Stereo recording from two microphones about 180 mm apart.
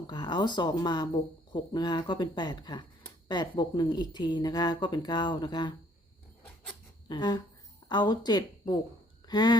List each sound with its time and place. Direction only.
0.1 s speech: 25° left (ahead or behind)
7.1 s speech: 25° left (ahead or behind)